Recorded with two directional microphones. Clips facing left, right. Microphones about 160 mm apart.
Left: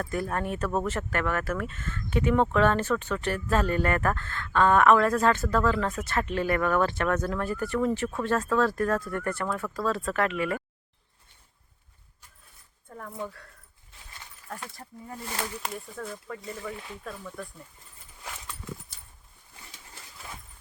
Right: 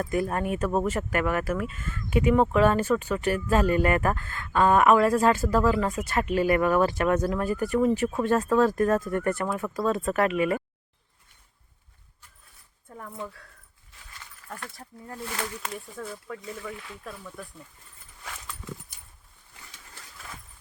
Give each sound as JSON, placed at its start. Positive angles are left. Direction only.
{"t": 0.0, "sound": "speech", "side_deg": -15}
{"t": 12.9, "sound": "speech", "side_deg": -5}
{"t": 14.5, "sound": "speech", "side_deg": 5}